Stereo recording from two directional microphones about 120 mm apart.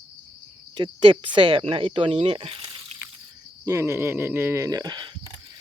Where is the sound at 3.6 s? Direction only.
25° right (ahead or behind).